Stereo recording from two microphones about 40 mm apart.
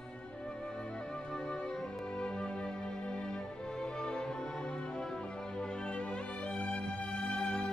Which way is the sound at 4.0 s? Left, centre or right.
Left.